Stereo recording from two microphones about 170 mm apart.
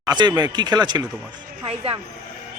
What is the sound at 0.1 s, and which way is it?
A man's voice, 25° right (ahead or behind).